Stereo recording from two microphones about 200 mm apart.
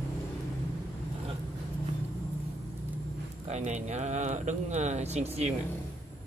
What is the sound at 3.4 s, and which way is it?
Speech, 35° right (ahead or behind).